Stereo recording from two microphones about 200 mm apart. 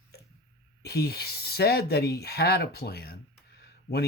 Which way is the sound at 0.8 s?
55° left (ahead or behind).